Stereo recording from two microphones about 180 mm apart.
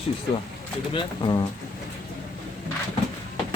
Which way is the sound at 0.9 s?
25° left (ahead or behind).